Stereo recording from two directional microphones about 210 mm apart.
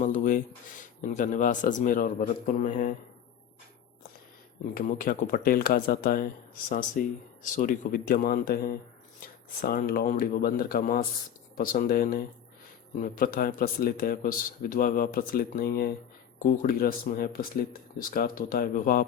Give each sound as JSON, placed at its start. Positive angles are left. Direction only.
{"t": 0.0, "sound": "speech", "side_deg": 40}
{"t": 4.7, "sound": "speech", "side_deg": 40}